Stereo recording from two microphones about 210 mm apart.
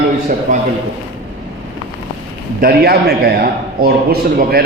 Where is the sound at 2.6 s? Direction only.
45° right (ahead or behind).